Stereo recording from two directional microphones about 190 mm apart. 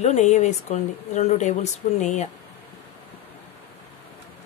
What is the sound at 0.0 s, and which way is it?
Speech, 35° left (ahead or behind).